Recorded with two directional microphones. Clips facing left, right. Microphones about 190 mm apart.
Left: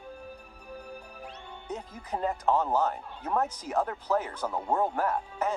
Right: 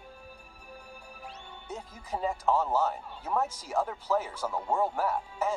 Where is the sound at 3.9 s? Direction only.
5° right (ahead or behind).